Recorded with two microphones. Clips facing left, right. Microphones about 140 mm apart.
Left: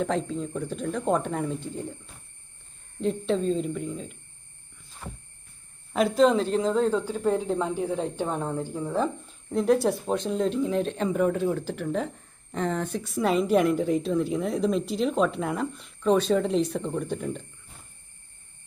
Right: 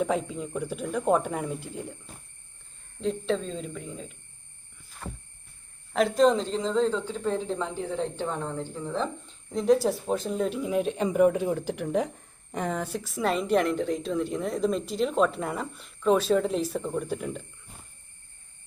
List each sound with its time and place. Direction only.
0.0 s speech: 10° right (ahead or behind)
3.0 s a woman's voice: 5° left (ahead or behind)
5.0 s heart sounds: 10° left (ahead or behind)
5.9 s a woman's voice: centre (ahead or behind)